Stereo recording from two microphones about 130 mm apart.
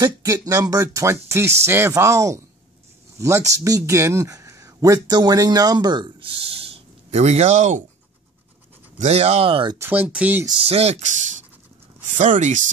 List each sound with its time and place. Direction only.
0.0 s speech: 25° right (ahead or behind); by 7.8 s 65° right (ahead or behind)
8.9 s speech: 55° right (ahead or behind)
9.8 s speech: 15° right (ahead or behind)
10.6 s speech: 50° right (ahead or behind)
12.2 s speech: 70° right (ahead or behind)